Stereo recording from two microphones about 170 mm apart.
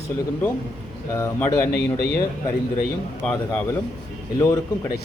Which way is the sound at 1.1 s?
20° left (ahead or behind).